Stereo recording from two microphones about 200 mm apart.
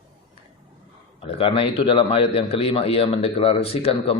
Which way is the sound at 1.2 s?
30° left (ahead or behind).